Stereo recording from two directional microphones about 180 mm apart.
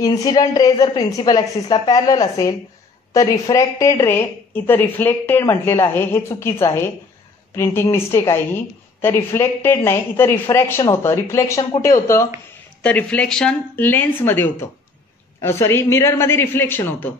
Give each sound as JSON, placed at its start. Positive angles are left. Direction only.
{"t": 0.0, "sound": "a woman's voice", "side_deg": 20}
{"t": 12.8, "sound": "a woman's voice", "side_deg": 10}